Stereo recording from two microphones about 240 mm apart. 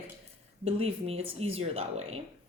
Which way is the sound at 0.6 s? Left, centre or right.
Right.